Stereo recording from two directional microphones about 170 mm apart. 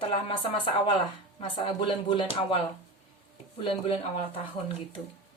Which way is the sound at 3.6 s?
30° left (ahead or behind).